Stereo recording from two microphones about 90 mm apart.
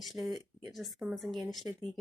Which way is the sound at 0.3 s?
45° right (ahead or behind).